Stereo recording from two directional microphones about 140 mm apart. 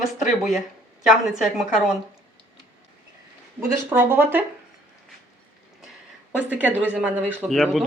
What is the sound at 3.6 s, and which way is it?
Speech, 15° right (ahead or behind).